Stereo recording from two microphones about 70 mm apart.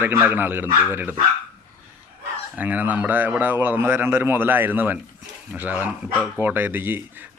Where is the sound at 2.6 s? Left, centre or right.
Right.